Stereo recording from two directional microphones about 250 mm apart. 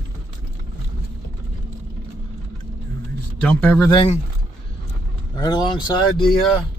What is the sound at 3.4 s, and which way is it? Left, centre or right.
Speech, centre.